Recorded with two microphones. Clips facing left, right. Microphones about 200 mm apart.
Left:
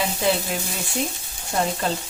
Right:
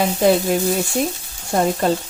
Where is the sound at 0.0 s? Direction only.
45° right (ahead or behind).